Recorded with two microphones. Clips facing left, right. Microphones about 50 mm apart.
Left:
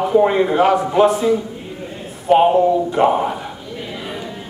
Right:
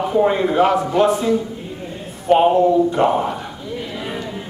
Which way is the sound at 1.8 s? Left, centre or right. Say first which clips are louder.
Even; centre.